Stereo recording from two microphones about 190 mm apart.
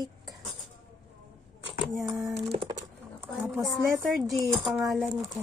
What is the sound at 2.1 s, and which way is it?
A woman's voice, centre (ahead or behind).